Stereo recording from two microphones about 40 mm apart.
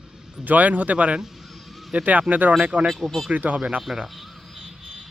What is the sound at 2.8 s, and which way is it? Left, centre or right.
Speech, centre.